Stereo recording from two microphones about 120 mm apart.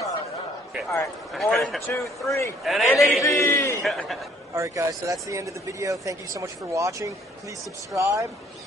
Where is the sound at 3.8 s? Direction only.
Centre (ahead or behind).